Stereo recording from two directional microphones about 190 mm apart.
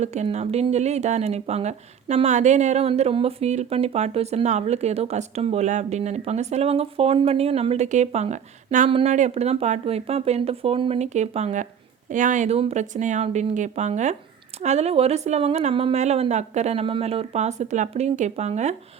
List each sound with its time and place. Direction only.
0.0 s speech: 35° right (ahead or behind)